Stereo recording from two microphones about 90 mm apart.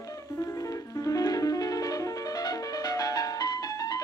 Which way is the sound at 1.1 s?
40° left (ahead or behind).